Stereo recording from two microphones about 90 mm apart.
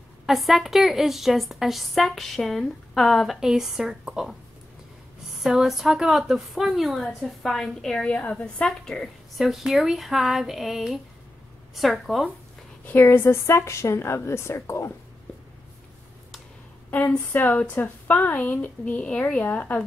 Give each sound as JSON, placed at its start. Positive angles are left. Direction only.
{"t": 0.3, "sound": "a woman's voice", "side_deg": 0}
{"t": 5.4, "sound": "a woman's voice", "side_deg": -5}
{"t": 12.8, "sound": "a woman's voice", "side_deg": 20}
{"t": 17.3, "sound": "a woman's voice", "side_deg": 20}